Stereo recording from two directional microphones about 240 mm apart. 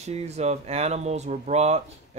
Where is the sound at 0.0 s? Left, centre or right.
Right.